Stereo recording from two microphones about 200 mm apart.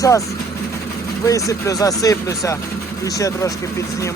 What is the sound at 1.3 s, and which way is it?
Speech, 15° left (ahead or behind).